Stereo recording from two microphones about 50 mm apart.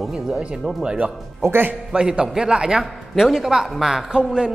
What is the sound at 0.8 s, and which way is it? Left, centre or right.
A man's voice, right.